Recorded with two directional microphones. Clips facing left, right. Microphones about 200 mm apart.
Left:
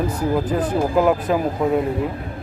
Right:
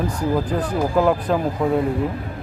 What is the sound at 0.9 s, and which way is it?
Speech, 5° left (ahead or behind).